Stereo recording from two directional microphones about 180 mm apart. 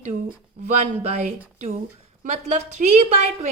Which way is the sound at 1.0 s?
35° right (ahead or behind).